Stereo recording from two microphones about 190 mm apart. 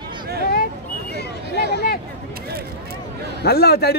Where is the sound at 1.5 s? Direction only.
60° left (ahead or behind).